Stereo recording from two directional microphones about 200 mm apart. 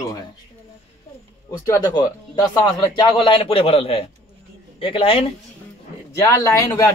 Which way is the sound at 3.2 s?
25° left (ahead or behind).